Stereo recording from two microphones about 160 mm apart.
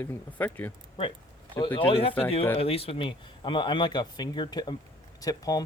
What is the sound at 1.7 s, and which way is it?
Speech, 35° left (ahead or behind).